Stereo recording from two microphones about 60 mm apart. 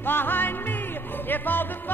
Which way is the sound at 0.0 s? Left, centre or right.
Left.